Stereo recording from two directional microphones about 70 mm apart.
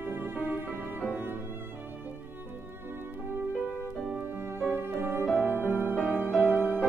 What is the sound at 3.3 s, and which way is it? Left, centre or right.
Music, right.